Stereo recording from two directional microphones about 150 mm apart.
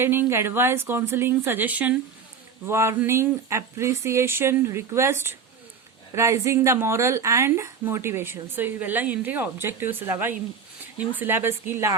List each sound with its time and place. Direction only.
0.0 s speech: 15° right (ahead or behind)